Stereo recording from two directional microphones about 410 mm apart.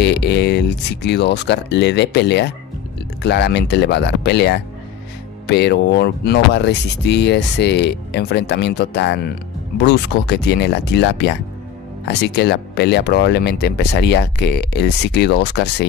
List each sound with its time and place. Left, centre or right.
0.0 s speech: left